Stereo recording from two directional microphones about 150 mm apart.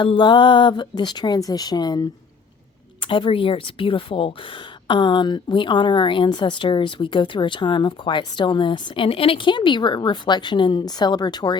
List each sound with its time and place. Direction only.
0.2 s a woman's voice: 30° left (ahead or behind)